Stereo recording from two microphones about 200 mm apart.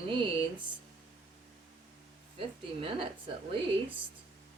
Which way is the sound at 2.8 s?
25° right (ahead or behind).